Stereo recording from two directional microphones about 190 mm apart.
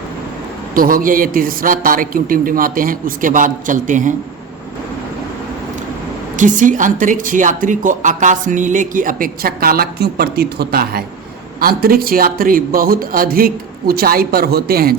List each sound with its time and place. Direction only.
0.7 s a woman's voice: 50° right (ahead or behind)
6.3 s a woman's voice: 40° right (ahead or behind)